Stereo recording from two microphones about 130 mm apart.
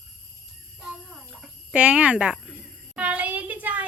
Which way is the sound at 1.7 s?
10° right (ahead or behind).